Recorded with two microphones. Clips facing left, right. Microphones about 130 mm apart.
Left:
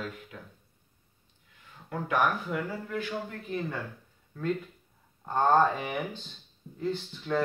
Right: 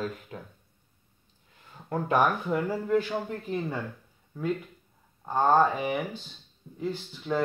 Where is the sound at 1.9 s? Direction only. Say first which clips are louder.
Right 3 dB; 35° right (ahead or behind).